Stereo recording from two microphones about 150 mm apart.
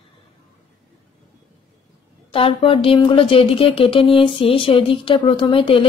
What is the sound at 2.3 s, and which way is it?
Speech, 35° left (ahead or behind).